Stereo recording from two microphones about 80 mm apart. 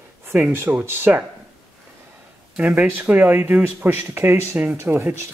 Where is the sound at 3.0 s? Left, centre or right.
Right.